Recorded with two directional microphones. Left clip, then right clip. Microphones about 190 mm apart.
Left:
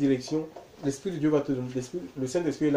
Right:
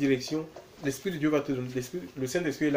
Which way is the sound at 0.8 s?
Centre (ahead or behind).